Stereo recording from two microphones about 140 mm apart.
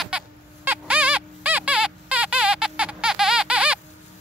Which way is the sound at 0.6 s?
10° right (ahead or behind).